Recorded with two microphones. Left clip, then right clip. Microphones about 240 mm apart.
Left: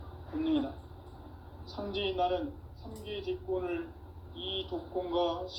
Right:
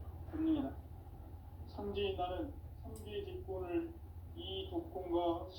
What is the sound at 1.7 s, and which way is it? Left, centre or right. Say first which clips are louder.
Speech: left 6 dB; left.